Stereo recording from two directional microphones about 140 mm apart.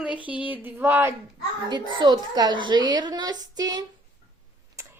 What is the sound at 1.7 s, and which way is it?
A woman's voice, 30° right (ahead or behind).